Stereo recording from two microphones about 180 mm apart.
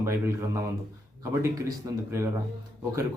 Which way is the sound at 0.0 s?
15° right (ahead or behind).